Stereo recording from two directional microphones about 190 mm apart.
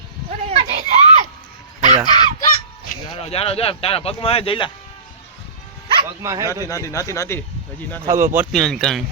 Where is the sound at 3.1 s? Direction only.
30° left (ahead or behind).